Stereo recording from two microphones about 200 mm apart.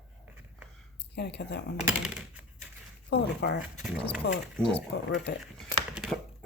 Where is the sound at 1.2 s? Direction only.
55° left (ahead or behind).